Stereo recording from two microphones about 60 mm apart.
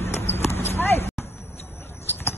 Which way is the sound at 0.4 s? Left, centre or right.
Left.